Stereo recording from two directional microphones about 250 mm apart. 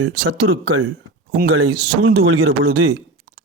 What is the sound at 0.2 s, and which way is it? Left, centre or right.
Speech, right.